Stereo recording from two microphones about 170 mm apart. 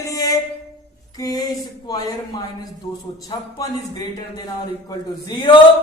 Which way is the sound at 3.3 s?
25° left (ahead or behind).